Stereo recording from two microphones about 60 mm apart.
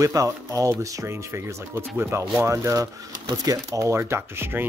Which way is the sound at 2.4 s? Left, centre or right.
Right.